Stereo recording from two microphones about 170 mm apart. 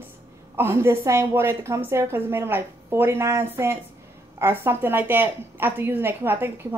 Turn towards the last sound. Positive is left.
turn(degrees=-15)  # may be behind; listen again after turning